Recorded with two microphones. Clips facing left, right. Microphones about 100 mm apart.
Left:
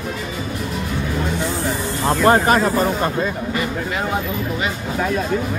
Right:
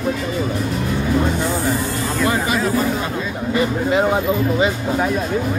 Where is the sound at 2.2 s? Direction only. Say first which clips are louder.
Left 6 dB; 50° left (ahead or behind).